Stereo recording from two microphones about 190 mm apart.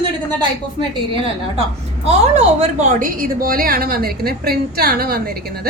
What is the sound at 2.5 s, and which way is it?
A woman's voice, 40° right (ahead or behind).